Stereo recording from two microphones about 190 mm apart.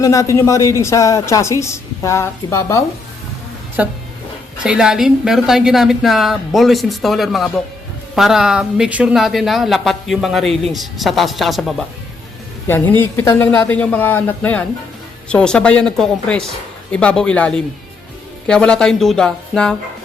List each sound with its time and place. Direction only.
0.0 s a woman's voice: 15° left (ahead or behind)
3.8 s speech: 10° right (ahead or behind)
12.6 s a woman's voice: 10° left (ahead or behind)